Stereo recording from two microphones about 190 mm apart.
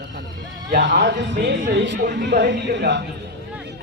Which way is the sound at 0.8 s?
70° right (ahead or behind).